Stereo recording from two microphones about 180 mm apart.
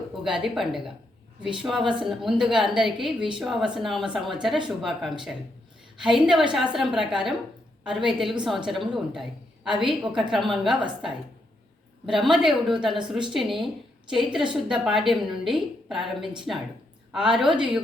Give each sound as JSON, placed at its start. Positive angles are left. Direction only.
{"t": 0.3, "sound": "a woman's voice", "side_deg": -5}
{"t": 1.8, "sound": "a woman's voice", "side_deg": -25}
{"t": 2.0, "sound": "a woman's voice", "side_deg": 0}
{"t": 12.0, "sound": "a woman's voice", "side_deg": 0}